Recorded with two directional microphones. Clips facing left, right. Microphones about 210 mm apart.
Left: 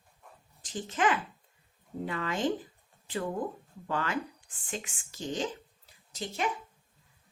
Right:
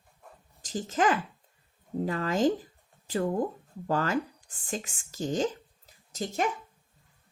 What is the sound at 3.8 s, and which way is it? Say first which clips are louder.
Speech: right 5 dB; 40° right (ahead or behind).